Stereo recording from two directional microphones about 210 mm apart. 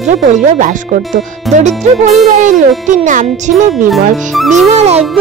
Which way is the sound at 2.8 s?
35° right (ahead or behind).